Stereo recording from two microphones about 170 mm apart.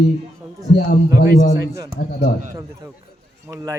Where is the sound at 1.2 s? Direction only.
55° left (ahead or behind).